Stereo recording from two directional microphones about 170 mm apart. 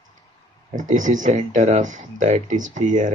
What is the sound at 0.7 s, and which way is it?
Speech, 50° right (ahead or behind).